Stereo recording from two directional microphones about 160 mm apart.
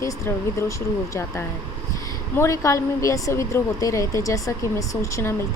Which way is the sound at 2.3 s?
20° left (ahead or behind).